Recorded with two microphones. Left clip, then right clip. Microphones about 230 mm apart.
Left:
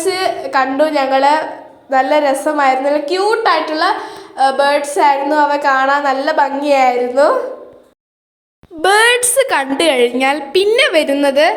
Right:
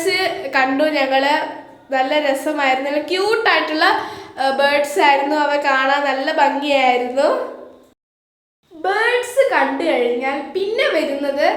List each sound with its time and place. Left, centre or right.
0.0 s a woman's voice: centre
8.8 s a woman's voice: left